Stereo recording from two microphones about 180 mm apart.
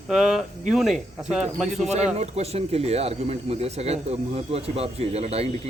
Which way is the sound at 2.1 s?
35° right (ahead or behind).